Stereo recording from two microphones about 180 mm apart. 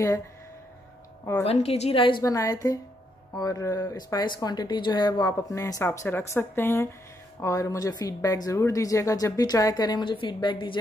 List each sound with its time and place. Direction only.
1.4 s speech: 35° left (ahead or behind)